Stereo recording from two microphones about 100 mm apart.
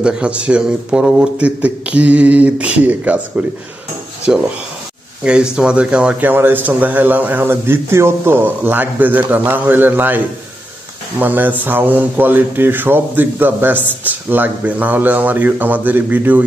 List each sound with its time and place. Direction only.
0.0 s speech: 10° right (ahead or behind)